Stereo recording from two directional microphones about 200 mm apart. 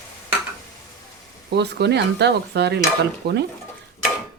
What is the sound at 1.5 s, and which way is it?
Speech, 55° right (ahead or behind).